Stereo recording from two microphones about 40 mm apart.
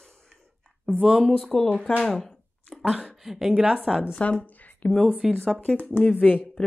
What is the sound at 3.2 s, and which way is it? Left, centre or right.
Speech, centre.